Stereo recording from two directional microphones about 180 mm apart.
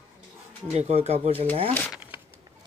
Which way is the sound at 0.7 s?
35° right (ahead or behind).